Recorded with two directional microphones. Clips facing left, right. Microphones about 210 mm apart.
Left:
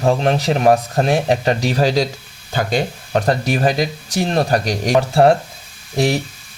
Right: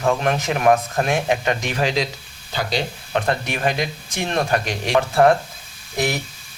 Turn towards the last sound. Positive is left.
turn(degrees=30)  # may be behind; listen again after turning